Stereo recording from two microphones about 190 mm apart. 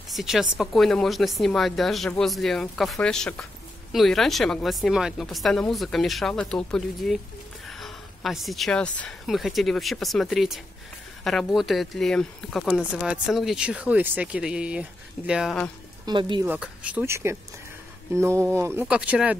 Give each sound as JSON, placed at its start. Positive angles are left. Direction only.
{"t": 0.1, "sound": "speech", "side_deg": 0}
{"t": 16.1, "sound": "speech", "side_deg": -25}
{"t": 16.4, "sound": "speech", "side_deg": -5}